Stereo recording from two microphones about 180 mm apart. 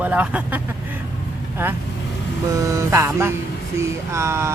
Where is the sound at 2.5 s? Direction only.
20° right (ahead or behind).